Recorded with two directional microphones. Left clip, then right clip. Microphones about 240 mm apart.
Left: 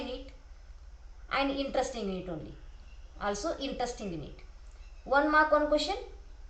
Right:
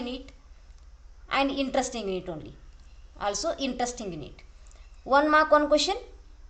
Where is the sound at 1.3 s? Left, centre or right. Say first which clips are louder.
Right 4 dB; right.